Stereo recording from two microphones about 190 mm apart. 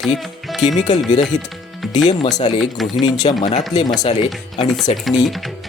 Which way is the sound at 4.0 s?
35° left (ahead or behind).